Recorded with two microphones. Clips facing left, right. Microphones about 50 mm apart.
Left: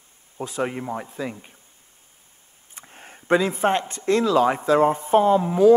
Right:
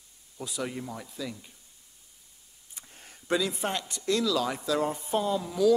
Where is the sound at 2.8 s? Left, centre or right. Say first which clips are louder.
Left 7 dB; left.